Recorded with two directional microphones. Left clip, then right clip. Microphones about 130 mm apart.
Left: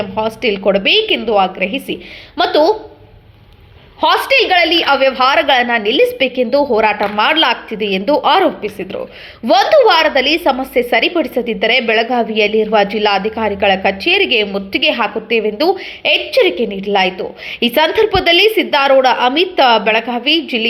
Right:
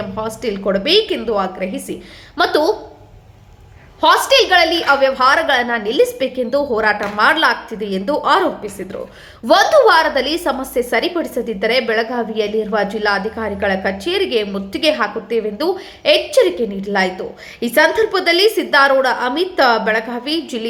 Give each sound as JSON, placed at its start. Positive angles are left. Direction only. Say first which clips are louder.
{"t": 0.2, "sound": "a woman's voice", "louder": "left 7 dB", "side_deg": 15}
{"t": 2.3, "sound": "speech", "louder": "left 3 dB", "side_deg": 5}
{"t": 4.0, "sound": "a woman's voice", "louder": "even", "side_deg": 20}